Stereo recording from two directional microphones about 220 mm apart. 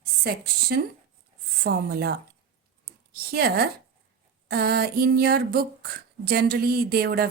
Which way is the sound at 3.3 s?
45° right (ahead or behind).